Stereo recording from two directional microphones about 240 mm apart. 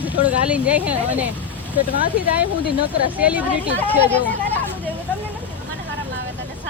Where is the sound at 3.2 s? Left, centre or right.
Centre.